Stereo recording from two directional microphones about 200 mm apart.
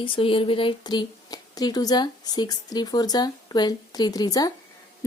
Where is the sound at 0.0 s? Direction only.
25° left (ahead or behind).